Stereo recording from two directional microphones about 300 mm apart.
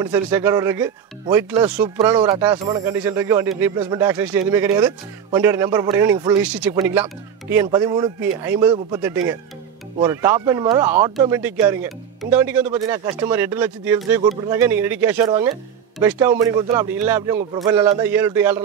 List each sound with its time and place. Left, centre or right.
0.0 s speech: centre